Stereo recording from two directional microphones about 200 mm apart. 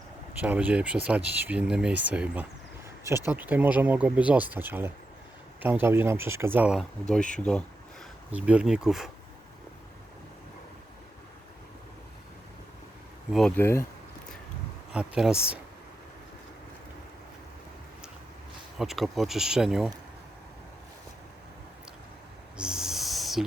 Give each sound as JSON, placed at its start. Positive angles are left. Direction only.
{"t": 0.4, "sound": "speech", "side_deg": -5}
{"t": 7.1, "sound": "speech", "side_deg": 5}
{"t": 13.3, "sound": "speech", "side_deg": 5}
{"t": 14.9, "sound": "speech", "side_deg": -5}
{"t": 18.8, "sound": "speech", "side_deg": 0}
{"t": 22.5, "sound": "owl", "side_deg": -5}